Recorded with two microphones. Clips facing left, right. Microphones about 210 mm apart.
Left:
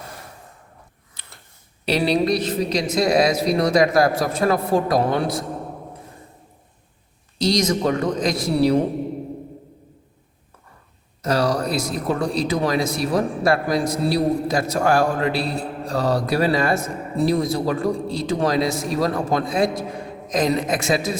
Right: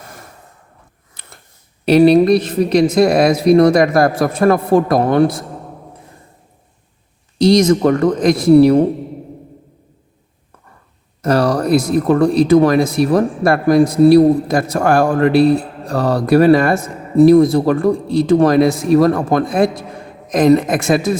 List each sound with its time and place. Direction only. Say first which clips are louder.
1.2 s a sound: right 5 dB; 50° right (ahead or behind)
1.8 s a woman's voice: right 11 dB; 50° right (ahead or behind)
7.3 s speech: right 9 dB; 55° right (ahead or behind)
11.2 s a woman's voice: right 6 dB; 55° right (ahead or behind)